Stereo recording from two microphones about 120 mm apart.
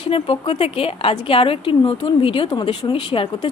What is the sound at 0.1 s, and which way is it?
A woman's voice, 50° left (ahead or behind).